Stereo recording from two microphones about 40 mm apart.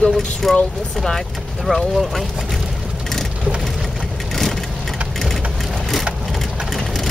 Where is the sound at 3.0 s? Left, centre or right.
Centre.